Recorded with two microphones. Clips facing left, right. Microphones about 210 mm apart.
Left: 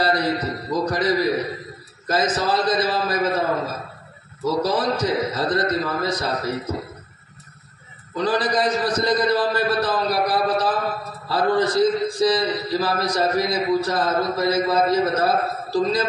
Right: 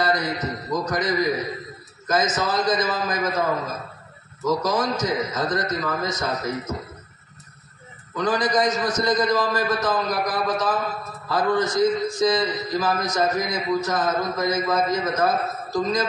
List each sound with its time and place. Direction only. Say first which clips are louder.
0.0 s a man's voice: left 2 dB; 30° left (ahead or behind)
8.2 s a man's voice: left 1 dB; 30° left (ahead or behind)